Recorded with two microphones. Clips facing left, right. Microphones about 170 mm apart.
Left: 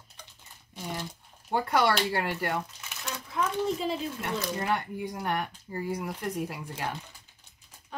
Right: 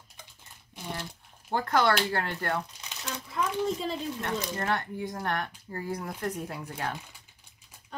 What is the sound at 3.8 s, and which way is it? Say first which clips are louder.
Speech: left 1 dB; 5° left (ahead or behind).